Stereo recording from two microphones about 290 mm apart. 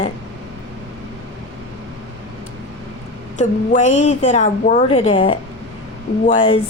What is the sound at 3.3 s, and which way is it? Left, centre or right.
A woman's voice, left.